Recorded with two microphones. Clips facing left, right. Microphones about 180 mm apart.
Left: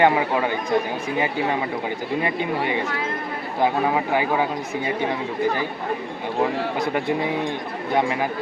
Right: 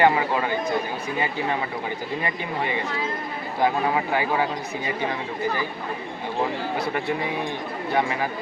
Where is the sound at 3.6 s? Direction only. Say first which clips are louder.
Left 2 dB; 15° left (ahead or behind).